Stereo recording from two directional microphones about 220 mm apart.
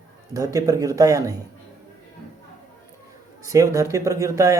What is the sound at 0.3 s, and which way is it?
Speech, 15° right (ahead or behind).